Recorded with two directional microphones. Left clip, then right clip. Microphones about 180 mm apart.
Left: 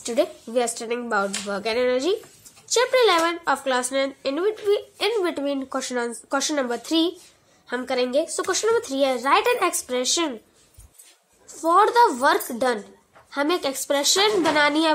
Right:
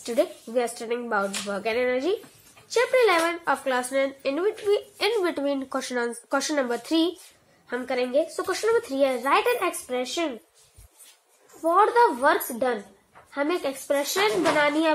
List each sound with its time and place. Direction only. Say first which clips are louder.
0.0 s a woman's voice: left 2 dB; 10° left (ahead or behind)
11.6 s speech: left 2 dB; 20° left (ahead or behind)